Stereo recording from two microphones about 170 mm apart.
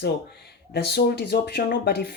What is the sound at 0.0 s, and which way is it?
Speech, 75° left (ahead or behind).